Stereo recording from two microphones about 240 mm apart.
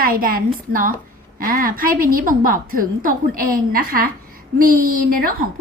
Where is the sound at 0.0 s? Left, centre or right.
Right.